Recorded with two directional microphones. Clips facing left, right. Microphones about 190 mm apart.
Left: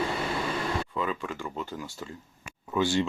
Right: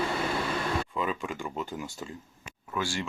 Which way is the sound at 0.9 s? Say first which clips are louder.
Even; 15° right (ahead or behind).